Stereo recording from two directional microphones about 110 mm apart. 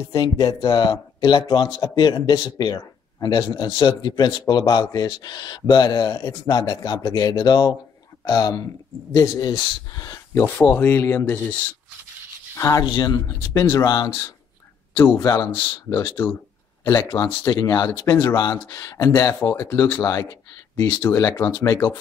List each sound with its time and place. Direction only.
0.2 s a man's voice: 40° left (ahead or behind)
10.3 s speech: 15° left (ahead or behind)
12.5 s speech: 25° left (ahead or behind)
12.8 s a man's voice: 40° left (ahead or behind)
15.0 s speech: 20° left (ahead or behind)
17.1 s speech: 50° left (ahead or behind)
17.5 s a man's voice: 30° left (ahead or behind)